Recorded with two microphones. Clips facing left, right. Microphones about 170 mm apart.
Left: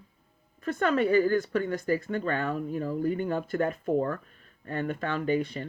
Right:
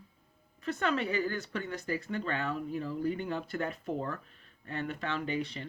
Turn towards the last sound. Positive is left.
turn(degrees=50)  # may be behind; listen again after turning